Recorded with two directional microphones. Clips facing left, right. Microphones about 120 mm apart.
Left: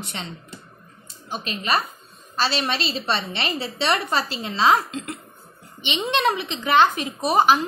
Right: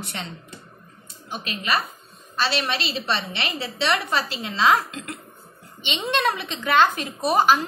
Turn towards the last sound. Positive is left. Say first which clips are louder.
# left 1 dB
turn(degrees=20)  # may be behind; listen again after turning